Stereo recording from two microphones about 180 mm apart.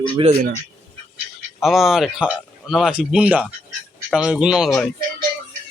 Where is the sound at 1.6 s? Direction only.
Centre (ahead or behind).